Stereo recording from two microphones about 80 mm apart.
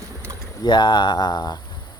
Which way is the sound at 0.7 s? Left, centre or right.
Left.